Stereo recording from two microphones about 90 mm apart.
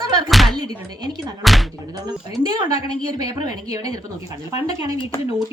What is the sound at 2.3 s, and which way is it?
A woman's voice, 50° right (ahead or behind).